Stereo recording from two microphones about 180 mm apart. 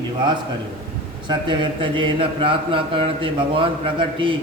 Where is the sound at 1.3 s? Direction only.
25° right (ahead or behind).